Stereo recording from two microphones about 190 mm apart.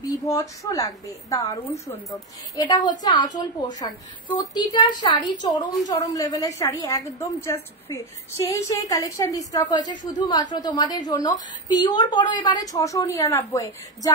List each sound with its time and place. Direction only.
0.1 s a woman's voice: 20° left (ahead or behind)